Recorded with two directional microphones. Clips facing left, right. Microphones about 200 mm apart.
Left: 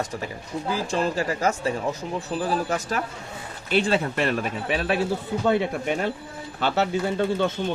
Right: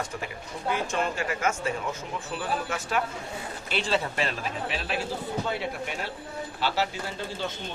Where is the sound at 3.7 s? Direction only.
55° left (ahead or behind).